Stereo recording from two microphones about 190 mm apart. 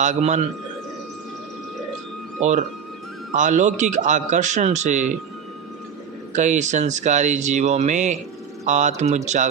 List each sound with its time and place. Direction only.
0.0 s speech: 40° right (ahead or behind)
2.4 s speech: 40° right (ahead or behind)
6.3 s speech: 40° right (ahead or behind)